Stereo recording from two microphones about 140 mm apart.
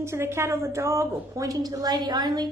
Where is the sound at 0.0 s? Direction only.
20° right (ahead or behind).